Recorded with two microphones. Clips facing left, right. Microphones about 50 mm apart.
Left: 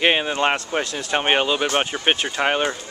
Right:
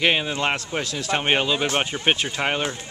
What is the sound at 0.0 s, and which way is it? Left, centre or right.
Speech, centre.